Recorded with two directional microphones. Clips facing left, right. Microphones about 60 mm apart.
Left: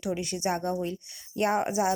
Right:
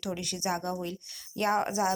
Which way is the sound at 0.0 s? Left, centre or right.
Left.